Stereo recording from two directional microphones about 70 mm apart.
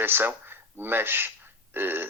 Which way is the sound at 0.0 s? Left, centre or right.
Right.